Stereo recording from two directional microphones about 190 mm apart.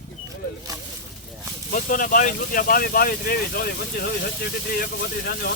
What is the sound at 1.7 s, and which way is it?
Speech, 45° left (ahead or behind).